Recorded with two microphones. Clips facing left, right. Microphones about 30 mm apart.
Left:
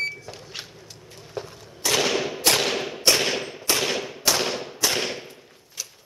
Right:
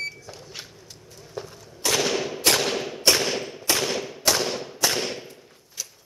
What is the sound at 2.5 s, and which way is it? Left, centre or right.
Thump, centre.